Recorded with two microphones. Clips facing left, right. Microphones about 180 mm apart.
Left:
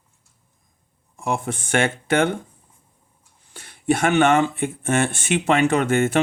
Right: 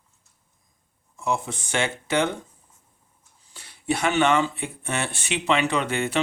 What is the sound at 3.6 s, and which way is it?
Speech, 50° left (ahead or behind).